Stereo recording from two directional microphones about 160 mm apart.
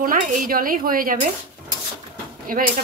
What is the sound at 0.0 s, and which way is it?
Speech, 60° right (ahead or behind).